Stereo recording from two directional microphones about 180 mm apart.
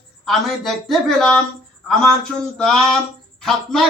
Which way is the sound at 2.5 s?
Centre (ahead or behind).